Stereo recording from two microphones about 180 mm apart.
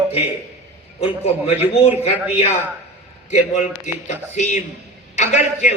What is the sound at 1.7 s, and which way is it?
Speech, 35° left (ahead or behind).